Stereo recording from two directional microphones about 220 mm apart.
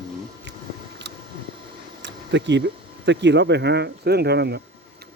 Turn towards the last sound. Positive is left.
turn(degrees=-50)  # may be behind; listen again after turning